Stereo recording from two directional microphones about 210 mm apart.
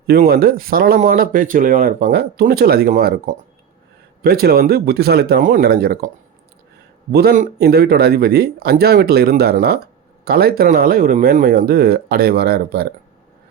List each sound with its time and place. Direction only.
0.2 s speech: 45° right (ahead or behind)
7.1 s speech: 50° right (ahead or behind)